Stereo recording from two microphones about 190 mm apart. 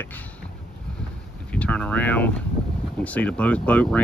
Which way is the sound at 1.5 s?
5° left (ahead or behind).